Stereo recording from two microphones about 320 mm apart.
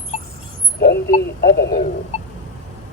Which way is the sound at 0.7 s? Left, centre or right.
Left.